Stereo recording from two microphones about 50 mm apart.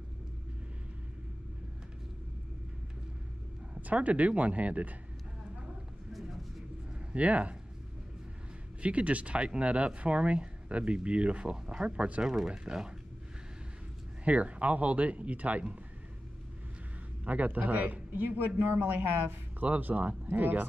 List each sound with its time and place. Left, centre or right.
3.8 s speech: right
7.1 s speech: right
8.8 s speech: right
11.6 s speech: centre
14.2 s speech: right
17.2 s speech: right